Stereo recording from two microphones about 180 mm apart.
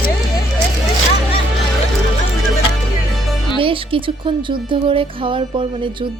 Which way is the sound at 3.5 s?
30° right (ahead or behind).